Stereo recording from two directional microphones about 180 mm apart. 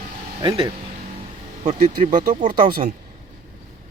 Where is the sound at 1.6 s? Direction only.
40° right (ahead or behind).